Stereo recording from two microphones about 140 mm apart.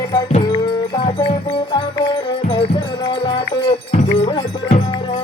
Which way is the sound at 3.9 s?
50° left (ahead or behind).